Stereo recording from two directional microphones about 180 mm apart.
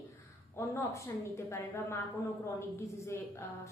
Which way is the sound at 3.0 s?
15° left (ahead or behind).